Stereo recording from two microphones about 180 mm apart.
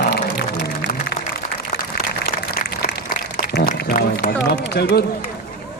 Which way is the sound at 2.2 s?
60° left (ahead or behind).